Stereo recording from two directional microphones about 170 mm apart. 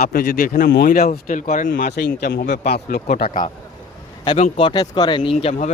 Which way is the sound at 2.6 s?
70° left (ahead or behind).